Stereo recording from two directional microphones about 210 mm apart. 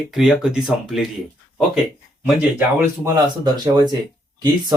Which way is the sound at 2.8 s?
15° right (ahead or behind).